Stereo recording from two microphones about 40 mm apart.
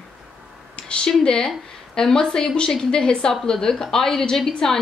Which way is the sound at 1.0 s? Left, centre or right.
Centre.